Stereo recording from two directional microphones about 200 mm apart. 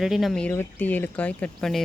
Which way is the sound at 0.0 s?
Centre (ahead or behind).